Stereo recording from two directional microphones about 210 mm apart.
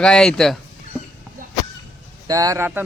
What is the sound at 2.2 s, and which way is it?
Speech, 15° right (ahead or behind).